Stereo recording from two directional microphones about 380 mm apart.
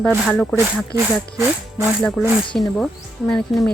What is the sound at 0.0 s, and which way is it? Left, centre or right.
Speech, centre.